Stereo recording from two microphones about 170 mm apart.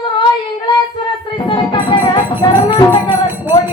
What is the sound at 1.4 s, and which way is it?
Music, 25° left (ahead or behind).